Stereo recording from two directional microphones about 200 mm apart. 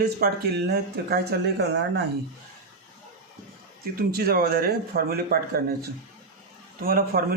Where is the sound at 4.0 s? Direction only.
50° right (ahead or behind).